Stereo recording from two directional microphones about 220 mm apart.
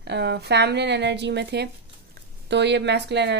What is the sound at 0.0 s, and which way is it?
Speech, 50° right (ahead or behind).